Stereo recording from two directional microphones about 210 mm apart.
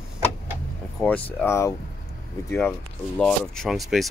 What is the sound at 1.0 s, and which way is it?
Speech, 10° left (ahead or behind).